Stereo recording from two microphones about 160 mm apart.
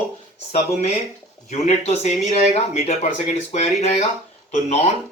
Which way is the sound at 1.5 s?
45° left (ahead or behind).